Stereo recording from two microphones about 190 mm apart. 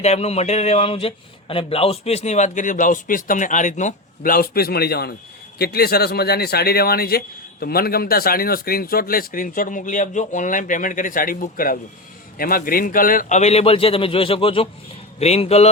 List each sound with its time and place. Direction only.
0.0 s a man's voice: 35° left (ahead or behind)